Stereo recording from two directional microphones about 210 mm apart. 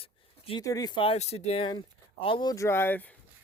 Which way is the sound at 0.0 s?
25° left (ahead or behind).